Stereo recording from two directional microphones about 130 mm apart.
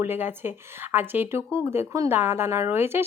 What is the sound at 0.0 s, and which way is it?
A woman's voice, 15° right (ahead or behind).